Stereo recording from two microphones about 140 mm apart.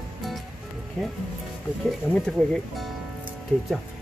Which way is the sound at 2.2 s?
5° left (ahead or behind).